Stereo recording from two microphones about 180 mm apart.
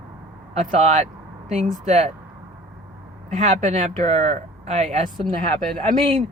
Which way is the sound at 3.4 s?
40° right (ahead or behind).